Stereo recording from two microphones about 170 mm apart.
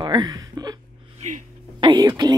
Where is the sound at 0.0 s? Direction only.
25° right (ahead or behind).